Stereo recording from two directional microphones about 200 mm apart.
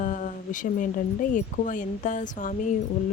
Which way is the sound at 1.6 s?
40° left (ahead or behind).